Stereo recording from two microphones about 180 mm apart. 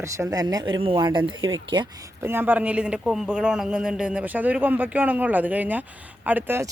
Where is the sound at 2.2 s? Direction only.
10° right (ahead or behind).